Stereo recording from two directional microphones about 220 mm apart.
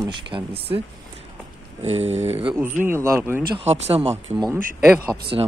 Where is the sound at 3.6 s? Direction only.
25° right (ahead or behind).